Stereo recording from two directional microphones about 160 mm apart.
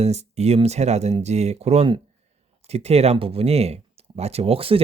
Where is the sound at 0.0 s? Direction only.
40° right (ahead or behind).